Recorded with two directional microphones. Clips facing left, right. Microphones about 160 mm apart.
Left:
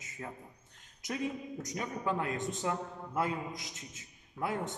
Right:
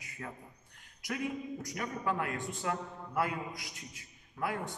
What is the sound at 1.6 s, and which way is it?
A man's voice, 20° left (ahead or behind).